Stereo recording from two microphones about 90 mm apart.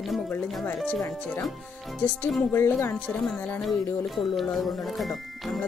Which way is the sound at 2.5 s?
30° left (ahead or behind).